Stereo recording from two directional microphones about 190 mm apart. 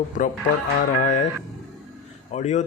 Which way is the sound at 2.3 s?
35° left (ahead or behind).